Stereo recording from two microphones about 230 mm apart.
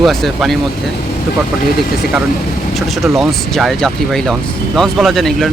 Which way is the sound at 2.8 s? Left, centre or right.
Centre.